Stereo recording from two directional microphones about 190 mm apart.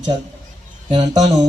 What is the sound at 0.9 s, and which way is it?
Speech, 35° right (ahead or behind).